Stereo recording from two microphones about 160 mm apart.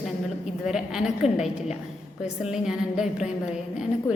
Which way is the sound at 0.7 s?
5° right (ahead or behind).